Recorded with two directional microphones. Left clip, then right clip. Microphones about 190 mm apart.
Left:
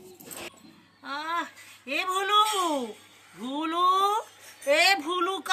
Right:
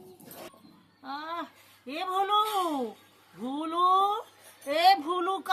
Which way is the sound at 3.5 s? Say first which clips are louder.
Left 1 dB; 20° right (ahead or behind).